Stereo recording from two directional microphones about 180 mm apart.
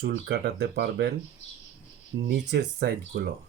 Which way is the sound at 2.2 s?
65° right (ahead or behind).